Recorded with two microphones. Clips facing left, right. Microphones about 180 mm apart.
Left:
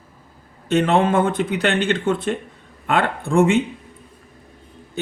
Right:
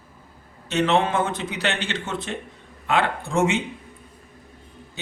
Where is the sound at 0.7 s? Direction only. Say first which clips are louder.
Left 4 dB; 55° left (ahead or behind).